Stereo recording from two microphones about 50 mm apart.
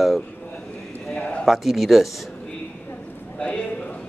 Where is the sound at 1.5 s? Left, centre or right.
Centre.